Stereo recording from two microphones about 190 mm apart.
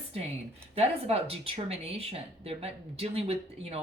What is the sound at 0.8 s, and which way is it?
Speech, 30° right (ahead or behind).